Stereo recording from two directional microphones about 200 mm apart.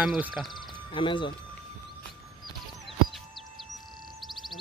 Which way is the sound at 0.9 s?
25° left (ahead or behind).